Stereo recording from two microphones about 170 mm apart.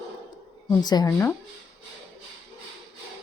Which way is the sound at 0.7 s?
25° left (ahead or behind).